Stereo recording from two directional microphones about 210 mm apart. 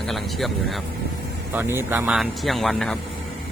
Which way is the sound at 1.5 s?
10° right (ahead or behind).